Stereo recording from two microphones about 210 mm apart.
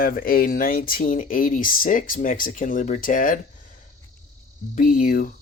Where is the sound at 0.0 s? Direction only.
45° left (ahead or behind).